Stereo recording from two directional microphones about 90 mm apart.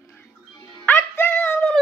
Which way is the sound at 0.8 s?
20° left (ahead or behind).